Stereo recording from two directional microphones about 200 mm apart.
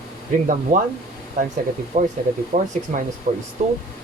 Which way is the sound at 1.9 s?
40° right (ahead or behind).